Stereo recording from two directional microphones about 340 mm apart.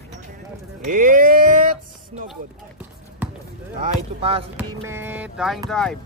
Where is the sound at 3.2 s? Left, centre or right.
Centre.